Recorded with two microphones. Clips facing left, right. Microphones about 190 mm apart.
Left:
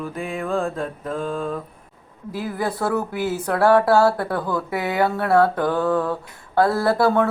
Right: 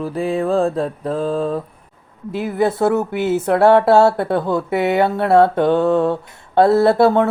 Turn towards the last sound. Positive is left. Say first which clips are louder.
# right 5 dB
turn(degrees=-25)  # may be behind; listen again after turning